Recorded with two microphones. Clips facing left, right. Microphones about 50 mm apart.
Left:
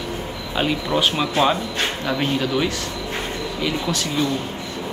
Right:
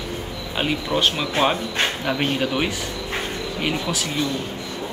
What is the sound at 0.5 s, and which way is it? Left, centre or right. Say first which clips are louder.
Speech: left 2 dB; centre.